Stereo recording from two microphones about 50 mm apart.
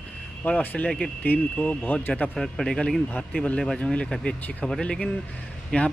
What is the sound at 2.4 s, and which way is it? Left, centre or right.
Speech, centre.